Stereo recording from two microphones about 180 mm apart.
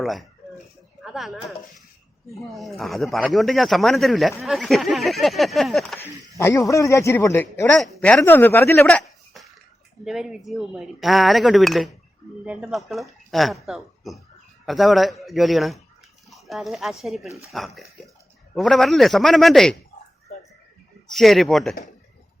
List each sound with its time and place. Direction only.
0.0 s speech: centre (ahead or behind)
6.3 s speech: 15° left (ahead or behind); by 19.7 s centre (ahead or behind)
21.1 s speech: centre (ahead or behind)